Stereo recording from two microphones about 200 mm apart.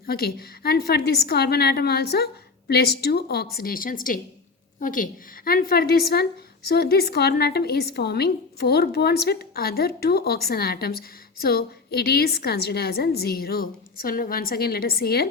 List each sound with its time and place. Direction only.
0.0 s a woman's voice: 50° left (ahead or behind)